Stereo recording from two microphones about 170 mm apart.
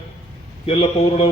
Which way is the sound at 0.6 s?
40° left (ahead or behind).